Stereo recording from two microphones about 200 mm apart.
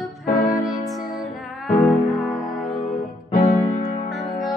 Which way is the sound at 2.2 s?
Centre (ahead or behind).